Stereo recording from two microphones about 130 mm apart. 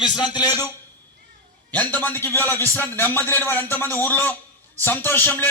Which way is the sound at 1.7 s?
10° left (ahead or behind).